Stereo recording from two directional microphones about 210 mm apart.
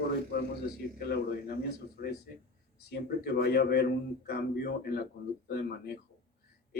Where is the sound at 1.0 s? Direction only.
50° left (ahead or behind).